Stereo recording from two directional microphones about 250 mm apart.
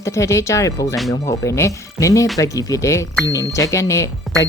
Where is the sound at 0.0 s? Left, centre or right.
Centre.